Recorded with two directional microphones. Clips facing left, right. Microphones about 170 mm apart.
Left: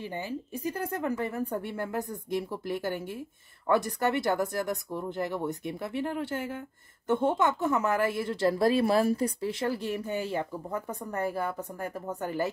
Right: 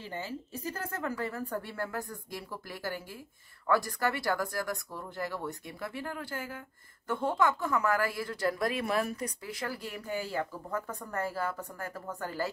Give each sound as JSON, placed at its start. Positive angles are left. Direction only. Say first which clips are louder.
{"t": 0.0, "sound": "speech", "louder": "left 4 dB", "side_deg": 15}